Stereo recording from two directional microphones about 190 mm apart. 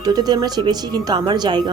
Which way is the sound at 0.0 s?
20° right (ahead or behind).